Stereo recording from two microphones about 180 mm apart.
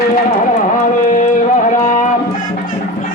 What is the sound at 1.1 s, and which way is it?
Music, 45° left (ahead or behind).